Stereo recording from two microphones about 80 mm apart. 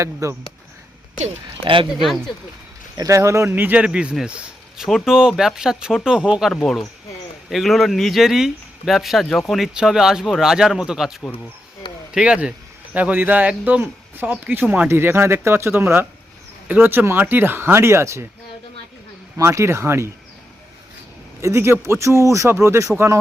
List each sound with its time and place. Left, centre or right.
0.0 s speech: right
1.6 s speech: right
2.0 s speech: centre
3.0 s speech: right
3.5 s speech: right
6.5 s speech: centre; by 18.3 s right
19.4 s speech: right
21.4 s speech: right